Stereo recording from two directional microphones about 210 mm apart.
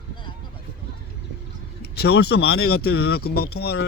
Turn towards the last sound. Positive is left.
turn(degrees=50)  # may be behind; listen again after turning